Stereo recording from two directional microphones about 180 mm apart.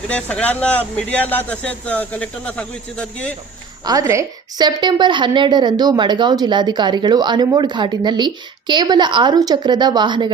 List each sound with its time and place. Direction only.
0.1 s speech: 5° left (ahead or behind)
3.8 s a woman's voice: 15° right (ahead or behind)